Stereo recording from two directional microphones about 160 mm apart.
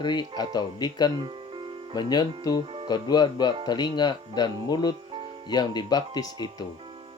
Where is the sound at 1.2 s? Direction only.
30° right (ahead or behind).